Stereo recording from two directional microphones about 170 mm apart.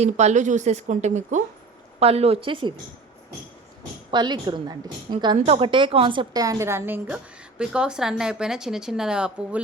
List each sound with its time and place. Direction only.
0.0 s a woman's voice: 40° right (ahead or behind)
4.1 s a woman's voice: 25° right (ahead or behind); by 9.6 s 5° right (ahead or behind)